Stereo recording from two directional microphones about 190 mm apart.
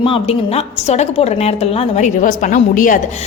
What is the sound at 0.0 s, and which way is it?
A woman's voice, 30° left (ahead or behind).